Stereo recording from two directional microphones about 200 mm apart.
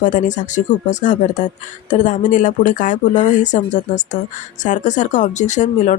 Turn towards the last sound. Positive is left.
turn(degrees=35)  # may be behind; listen again after turning